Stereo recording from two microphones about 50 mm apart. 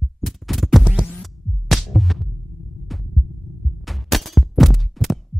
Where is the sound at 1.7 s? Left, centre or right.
Centre.